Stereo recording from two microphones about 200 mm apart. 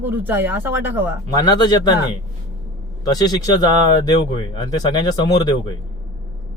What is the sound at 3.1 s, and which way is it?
Speech, 20° left (ahead or behind).